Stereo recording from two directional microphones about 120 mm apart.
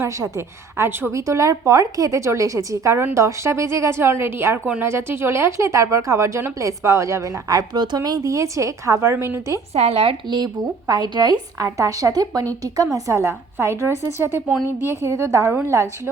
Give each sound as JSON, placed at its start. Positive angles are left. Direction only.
{"t": 0.0, "sound": "speech", "side_deg": -20}
{"t": 9.7, "sound": "speech", "side_deg": -60}
{"t": 10.2, "sound": "a woman's voice", "side_deg": -35}